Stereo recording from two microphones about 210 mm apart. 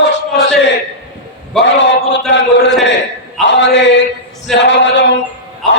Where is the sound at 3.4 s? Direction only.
55° left (ahead or behind).